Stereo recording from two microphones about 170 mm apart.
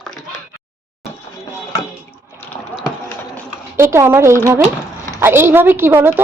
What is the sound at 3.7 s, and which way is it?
A woman's voice, 15° right (ahead or behind).